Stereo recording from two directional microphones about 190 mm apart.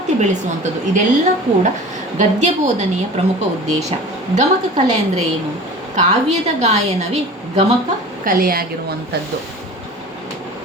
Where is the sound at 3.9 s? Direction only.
35° right (ahead or behind).